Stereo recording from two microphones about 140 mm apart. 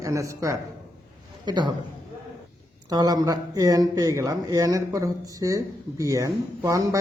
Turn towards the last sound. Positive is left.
turn(degrees=-20)  # may be behind; listen again after turning